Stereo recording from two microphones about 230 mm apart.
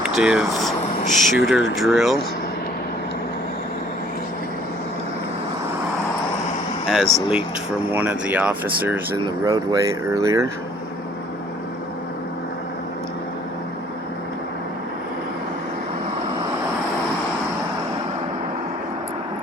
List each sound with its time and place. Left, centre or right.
0.0 s a sound: centre
1.7 s speech: centre
6.8 s speech: centre